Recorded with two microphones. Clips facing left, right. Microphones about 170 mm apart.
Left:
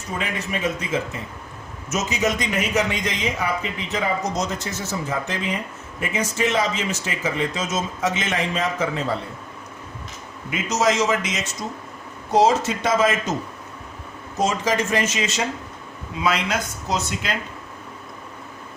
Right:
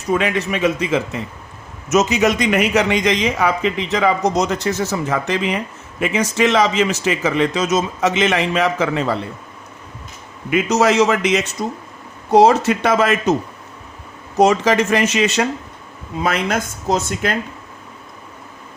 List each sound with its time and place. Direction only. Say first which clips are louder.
0.1 s a man's voice: right 9 dB; 75° right (ahead or behind)
10.5 s a man's voice: right 6 dB; 65° right (ahead or behind)
14.3 s a man's voice: right 8 dB; 70° right (ahead or behind)
16.1 s speech: right 3 dB; 50° right (ahead or behind)